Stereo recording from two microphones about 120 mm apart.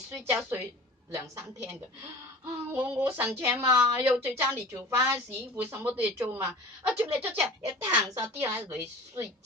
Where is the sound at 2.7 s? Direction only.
15° right (ahead or behind).